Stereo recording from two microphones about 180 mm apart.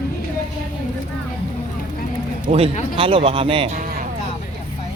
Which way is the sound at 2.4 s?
35° right (ahead or behind).